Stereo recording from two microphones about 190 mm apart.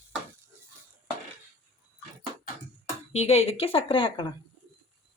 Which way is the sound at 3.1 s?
35° left (ahead or behind).